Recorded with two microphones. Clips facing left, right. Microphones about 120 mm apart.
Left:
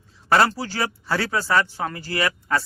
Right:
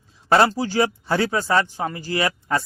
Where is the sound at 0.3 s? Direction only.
20° right (ahead or behind).